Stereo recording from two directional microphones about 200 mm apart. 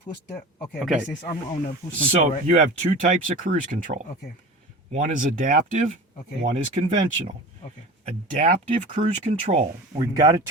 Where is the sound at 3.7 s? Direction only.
45° right (ahead or behind).